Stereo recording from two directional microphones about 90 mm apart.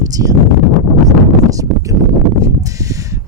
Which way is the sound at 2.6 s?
40° right (ahead or behind).